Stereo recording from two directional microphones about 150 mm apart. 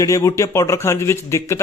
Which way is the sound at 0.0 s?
20° left (ahead or behind).